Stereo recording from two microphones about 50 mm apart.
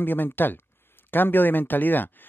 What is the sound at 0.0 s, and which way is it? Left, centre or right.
Speech, left.